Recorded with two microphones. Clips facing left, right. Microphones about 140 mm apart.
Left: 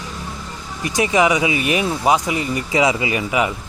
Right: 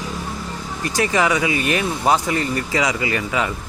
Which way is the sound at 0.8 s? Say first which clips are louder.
Left 3 dB; 15° left (ahead or behind).